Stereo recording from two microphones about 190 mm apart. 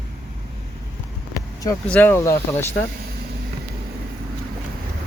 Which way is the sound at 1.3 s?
20° left (ahead or behind).